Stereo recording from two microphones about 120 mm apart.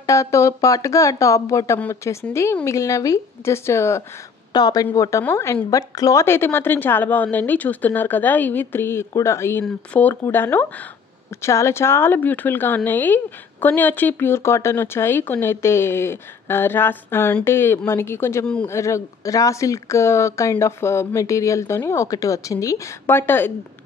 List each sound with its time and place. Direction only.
0.0 s speech: 25° left (ahead or behind)
4.5 s a woman's voice: 35° left (ahead or behind); by 23.5 s 20° left (ahead or behind)